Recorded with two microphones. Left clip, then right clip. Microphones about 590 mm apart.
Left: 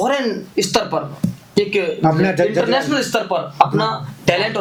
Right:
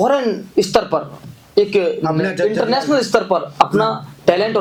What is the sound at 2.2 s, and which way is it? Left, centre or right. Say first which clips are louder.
Speech: even; left.